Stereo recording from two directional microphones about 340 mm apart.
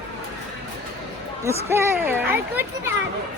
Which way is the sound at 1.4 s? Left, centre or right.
Centre.